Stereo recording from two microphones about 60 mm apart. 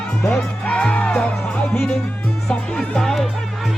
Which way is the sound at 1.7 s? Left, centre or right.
Left.